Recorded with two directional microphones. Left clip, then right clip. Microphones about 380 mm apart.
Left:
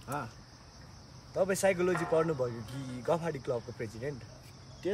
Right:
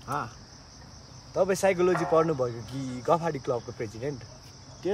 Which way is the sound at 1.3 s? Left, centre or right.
Centre.